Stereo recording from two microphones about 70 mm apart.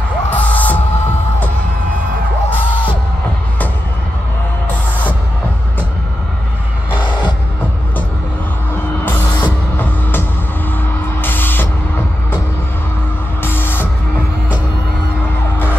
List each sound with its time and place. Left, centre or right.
0.3 s music: left
9.0 s music: left
11.1 s a sound: left
13.4 s music: left